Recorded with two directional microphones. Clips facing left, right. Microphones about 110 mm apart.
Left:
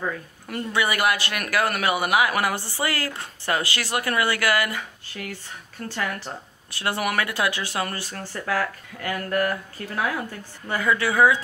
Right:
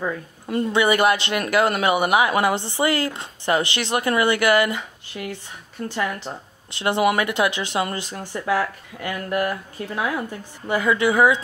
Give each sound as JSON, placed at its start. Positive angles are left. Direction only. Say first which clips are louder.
{"t": 0.5, "sound": "speech", "louder": "right 6 dB", "side_deg": -25}